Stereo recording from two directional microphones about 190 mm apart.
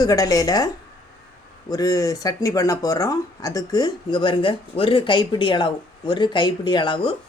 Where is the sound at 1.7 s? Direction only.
20° left (ahead or behind).